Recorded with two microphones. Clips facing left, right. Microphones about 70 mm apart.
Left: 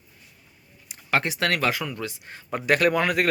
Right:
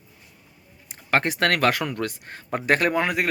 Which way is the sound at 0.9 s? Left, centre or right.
Right.